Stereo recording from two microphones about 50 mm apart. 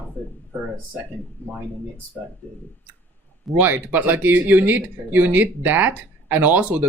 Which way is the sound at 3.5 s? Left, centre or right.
Right.